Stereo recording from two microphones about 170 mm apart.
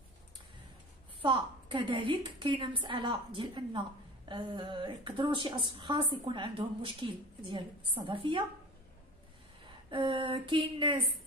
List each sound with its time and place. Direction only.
1.2 s a woman's voice: 30° right (ahead or behind)
9.8 s a woman's voice: 30° right (ahead or behind)